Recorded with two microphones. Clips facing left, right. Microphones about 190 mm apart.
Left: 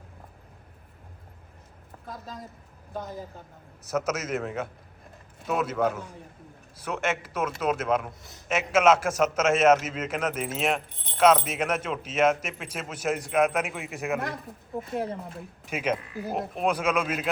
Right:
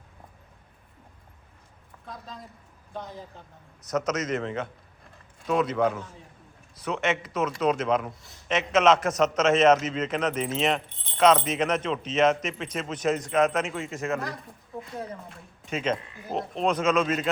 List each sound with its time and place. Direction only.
2.9 s speech: 5° left (ahead or behind)
14.8 s a woman's voice: 25° left (ahead or behind)
15.6 s speech: 10° left (ahead or behind)